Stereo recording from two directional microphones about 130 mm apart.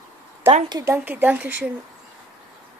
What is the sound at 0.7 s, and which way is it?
Speech, 30° right (ahead or behind).